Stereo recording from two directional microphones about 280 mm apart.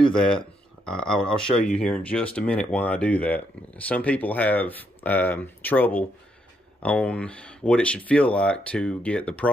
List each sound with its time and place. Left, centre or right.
0.8 s speech: centre